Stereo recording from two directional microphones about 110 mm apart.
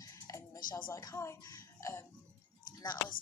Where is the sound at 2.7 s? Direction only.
40° left (ahead or behind).